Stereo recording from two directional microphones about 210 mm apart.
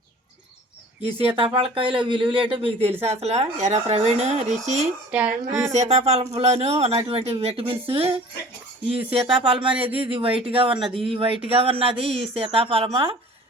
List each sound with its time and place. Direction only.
1.0 s speech: 25° right (ahead or behind)
5.1 s speech: 5° right (ahead or behind)
5.7 s speech: 30° right (ahead or behind)